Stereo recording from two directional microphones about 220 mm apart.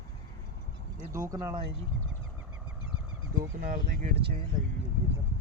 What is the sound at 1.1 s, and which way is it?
Speech, 15° right (ahead or behind).